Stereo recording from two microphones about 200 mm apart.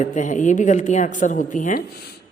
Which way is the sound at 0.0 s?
40° left (ahead or behind).